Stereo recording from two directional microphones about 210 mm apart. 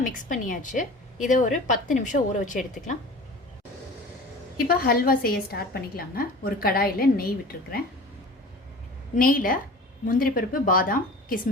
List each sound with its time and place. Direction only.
0.0 s a woman's voice: 40° left (ahead or behind)
4.5 s a woman's voice: 45° left (ahead or behind)
9.1 s a woman's voice: 40° left (ahead or behind)